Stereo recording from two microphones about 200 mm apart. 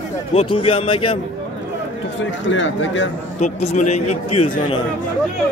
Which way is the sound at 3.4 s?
35° left (ahead or behind).